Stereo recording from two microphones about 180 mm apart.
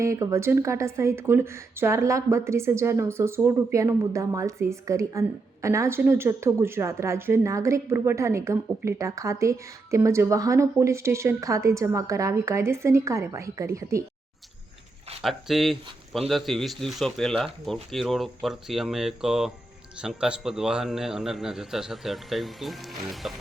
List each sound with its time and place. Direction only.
0.0 s a woman's voice: 15° right (ahead or behind)
15.2 s speech: centre (ahead or behind)